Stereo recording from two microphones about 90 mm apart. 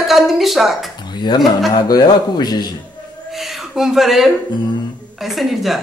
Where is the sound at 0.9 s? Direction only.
55° left (ahead or behind).